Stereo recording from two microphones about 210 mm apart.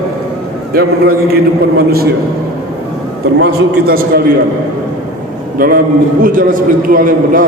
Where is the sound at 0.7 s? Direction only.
45° right (ahead or behind).